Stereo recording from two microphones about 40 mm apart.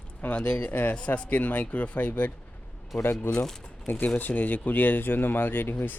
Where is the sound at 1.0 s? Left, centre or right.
Left.